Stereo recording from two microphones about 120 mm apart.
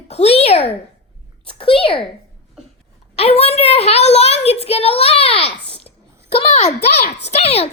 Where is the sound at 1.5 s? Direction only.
50° left (ahead or behind).